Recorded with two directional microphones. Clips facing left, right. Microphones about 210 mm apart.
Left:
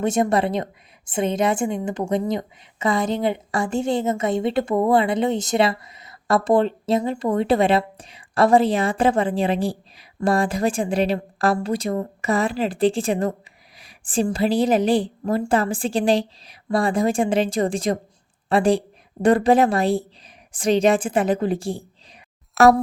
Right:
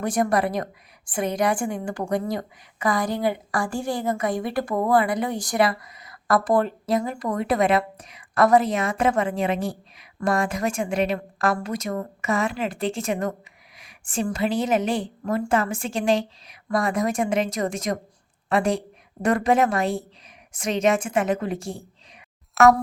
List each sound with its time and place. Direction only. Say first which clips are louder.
0.0 s a woman's voice: left 3 dB; 25° left (ahead or behind)
22.6 s speech: left 2 dB; centre (ahead or behind)